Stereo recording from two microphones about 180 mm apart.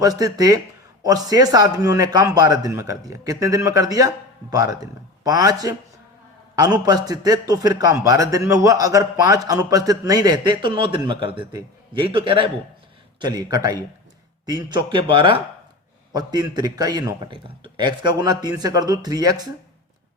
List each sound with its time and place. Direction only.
0.0 s a man's voice: 20° right (ahead or behind)
6.7 s a man's voice: 20° right (ahead or behind)